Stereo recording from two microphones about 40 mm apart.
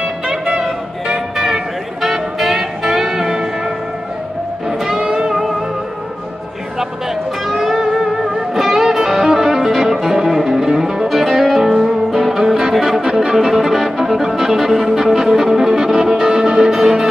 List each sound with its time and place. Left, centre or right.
1.0 s music: centre
5.3 s music: centre
7.8 s music: centre
13.0 s music: centre
13.5 s music: centre